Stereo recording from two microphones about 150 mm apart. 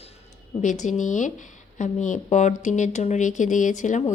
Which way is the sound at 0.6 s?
55° left (ahead or behind).